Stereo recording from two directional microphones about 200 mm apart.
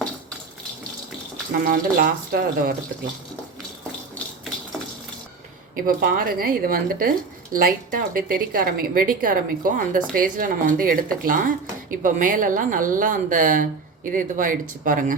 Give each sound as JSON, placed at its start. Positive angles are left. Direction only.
{"t": 1.6, "sound": "speech", "side_deg": -45}
{"t": 5.7, "sound": "speech", "side_deg": -45}